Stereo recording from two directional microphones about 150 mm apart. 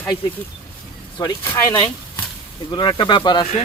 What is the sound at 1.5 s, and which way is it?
Speech, 15° left (ahead or behind).